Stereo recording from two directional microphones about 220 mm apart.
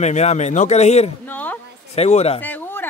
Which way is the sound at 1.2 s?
10° left (ahead or behind).